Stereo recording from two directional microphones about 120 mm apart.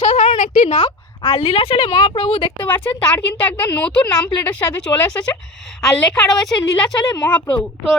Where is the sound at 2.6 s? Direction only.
15° left (ahead or behind).